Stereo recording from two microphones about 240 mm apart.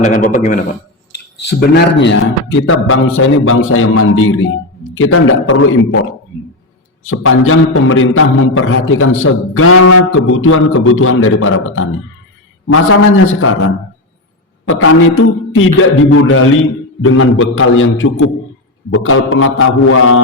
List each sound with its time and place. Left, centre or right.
0.0 s a man's voice: left
2.0 s a man's voice: left
7.1 s a man's voice: left